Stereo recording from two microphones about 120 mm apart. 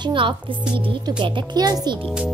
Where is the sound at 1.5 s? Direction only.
35° right (ahead or behind).